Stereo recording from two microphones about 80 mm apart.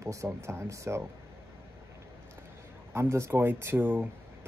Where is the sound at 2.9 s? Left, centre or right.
Right.